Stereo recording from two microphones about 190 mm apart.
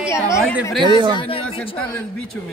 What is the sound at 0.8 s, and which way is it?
Speech, 25° right (ahead or behind).